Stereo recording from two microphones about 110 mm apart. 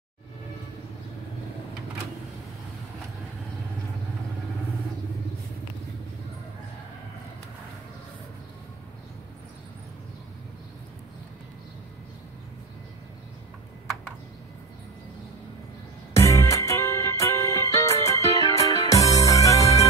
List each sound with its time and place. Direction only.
16.1 s music: 25° left (ahead or behind)